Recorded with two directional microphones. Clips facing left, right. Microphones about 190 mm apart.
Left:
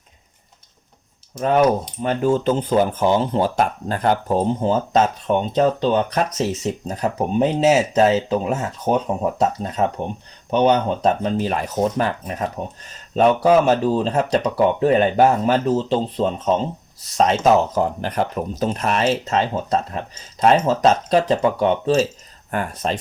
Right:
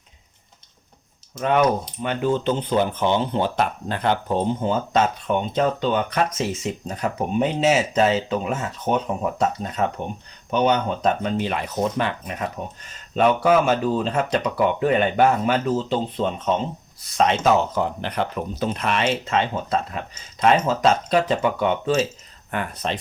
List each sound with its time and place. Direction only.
1.4 s speech: 35° left (ahead or behind)